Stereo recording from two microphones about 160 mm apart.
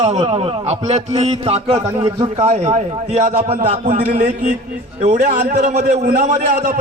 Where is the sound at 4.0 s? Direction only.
70° right (ahead or behind).